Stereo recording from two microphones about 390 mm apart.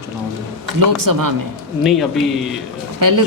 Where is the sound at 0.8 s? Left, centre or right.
Right.